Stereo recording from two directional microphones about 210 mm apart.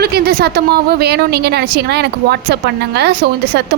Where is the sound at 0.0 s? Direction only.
50° right (ahead or behind).